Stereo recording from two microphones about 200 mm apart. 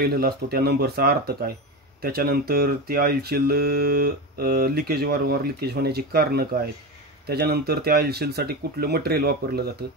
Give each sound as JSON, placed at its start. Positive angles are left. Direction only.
{"t": 0.0, "sound": "speech", "side_deg": -50}